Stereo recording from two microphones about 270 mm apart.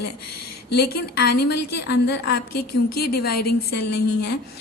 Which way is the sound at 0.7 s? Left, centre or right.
Left.